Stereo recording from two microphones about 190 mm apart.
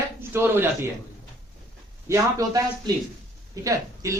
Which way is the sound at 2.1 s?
20° right (ahead or behind).